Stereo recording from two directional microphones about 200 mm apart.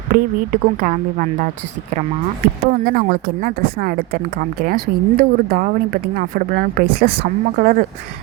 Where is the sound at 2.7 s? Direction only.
45° right (ahead or behind).